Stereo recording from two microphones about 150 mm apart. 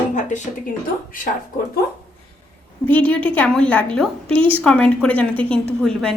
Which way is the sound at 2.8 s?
10° left (ahead or behind).